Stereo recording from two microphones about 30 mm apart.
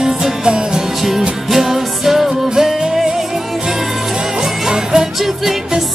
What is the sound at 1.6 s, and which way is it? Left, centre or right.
Music, centre.